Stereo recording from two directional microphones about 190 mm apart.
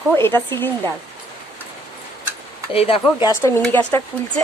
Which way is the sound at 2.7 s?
30° left (ahead or behind).